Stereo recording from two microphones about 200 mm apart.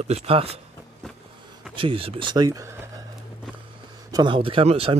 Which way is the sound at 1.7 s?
25° right (ahead or behind).